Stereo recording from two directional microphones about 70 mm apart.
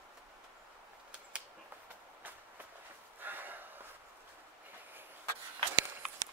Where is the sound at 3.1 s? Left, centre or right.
Right.